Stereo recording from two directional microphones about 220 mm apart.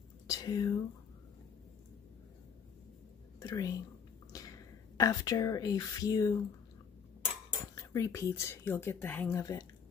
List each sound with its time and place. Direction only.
0.3 s speech: 15° left (ahead or behind)
3.3 s a woman's voice: 15° left (ahead or behind)
7.8 s speech: 15° left (ahead or behind)